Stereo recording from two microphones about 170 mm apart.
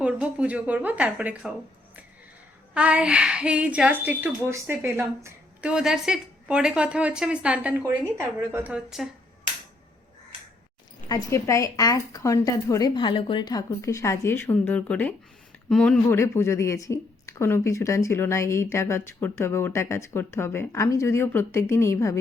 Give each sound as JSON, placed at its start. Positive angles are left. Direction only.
{"t": 0.0, "sound": "speech", "side_deg": -5}
{"t": 2.7, "sound": "a woman's voice", "side_deg": -5}
{"t": 11.1, "sound": "a woman's voice", "side_deg": 20}